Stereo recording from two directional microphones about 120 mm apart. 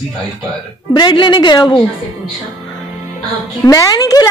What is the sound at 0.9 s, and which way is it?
Speech, 40° left (ahead or behind).